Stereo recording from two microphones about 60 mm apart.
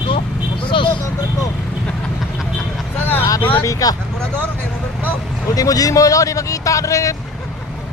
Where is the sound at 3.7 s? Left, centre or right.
Left.